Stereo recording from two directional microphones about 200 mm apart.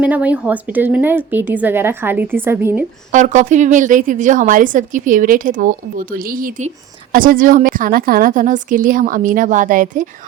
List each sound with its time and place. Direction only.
0.0 s a woman's voice: 5° right (ahead or behind)
3.1 s a woman's voice: 40° right (ahead or behind)